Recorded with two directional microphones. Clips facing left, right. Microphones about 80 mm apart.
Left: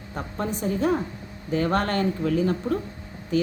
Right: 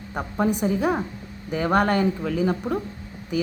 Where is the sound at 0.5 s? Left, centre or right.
Centre.